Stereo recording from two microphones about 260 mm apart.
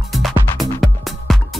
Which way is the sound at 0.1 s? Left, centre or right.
Centre.